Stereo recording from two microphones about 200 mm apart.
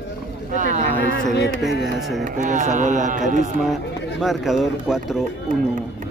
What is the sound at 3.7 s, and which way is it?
Speech, centre (ahead or behind).